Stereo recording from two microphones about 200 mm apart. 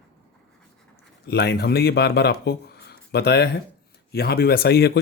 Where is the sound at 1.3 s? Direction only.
55° left (ahead or behind).